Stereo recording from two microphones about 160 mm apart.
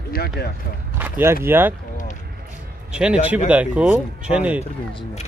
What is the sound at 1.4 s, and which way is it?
Speech, 15° right (ahead or behind).